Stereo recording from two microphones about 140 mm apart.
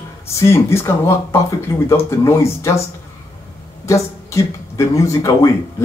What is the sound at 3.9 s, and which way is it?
Speech, 20° left (ahead or behind).